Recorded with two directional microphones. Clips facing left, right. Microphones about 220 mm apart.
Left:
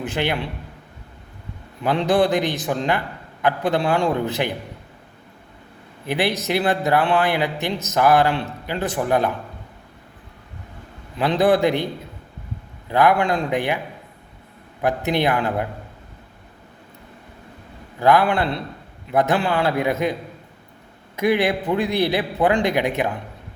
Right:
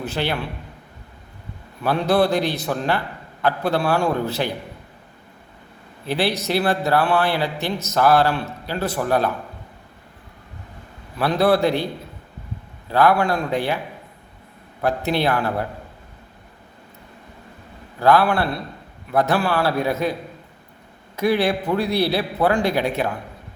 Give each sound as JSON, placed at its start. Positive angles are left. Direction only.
{"t": 0.0, "sound": "speech", "side_deg": 15}
{"t": 1.8, "sound": "speech", "side_deg": 20}
{"t": 6.1, "sound": "a man's voice", "side_deg": 20}
{"t": 11.2, "sound": "speech", "side_deg": 15}
{"t": 12.9, "sound": "speech", "side_deg": 15}
{"t": 14.8, "sound": "speech", "side_deg": 15}
{"t": 18.0, "sound": "a man's voice", "side_deg": 20}
{"t": 21.2, "sound": "a man's voice", "side_deg": 20}